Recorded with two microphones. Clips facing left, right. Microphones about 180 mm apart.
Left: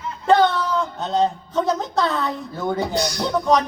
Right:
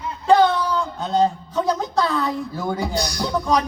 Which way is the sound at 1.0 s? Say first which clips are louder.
Right 3 dB; centre (ahead or behind).